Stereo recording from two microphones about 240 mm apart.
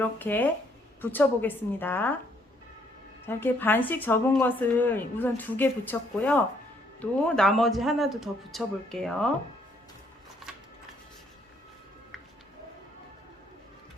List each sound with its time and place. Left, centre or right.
0.0 s a woman's voice: centre
3.2 s a woman's voice: centre